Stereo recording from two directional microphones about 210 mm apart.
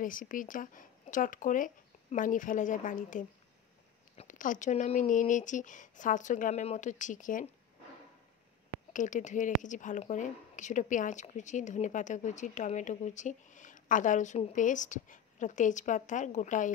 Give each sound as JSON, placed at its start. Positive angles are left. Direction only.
{"t": 0.0, "sound": "a woman's voice", "side_deg": 40}
{"t": 8.9, "sound": "a woman's voice", "side_deg": 35}